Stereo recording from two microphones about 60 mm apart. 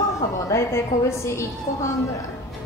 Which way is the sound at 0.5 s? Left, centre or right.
Left.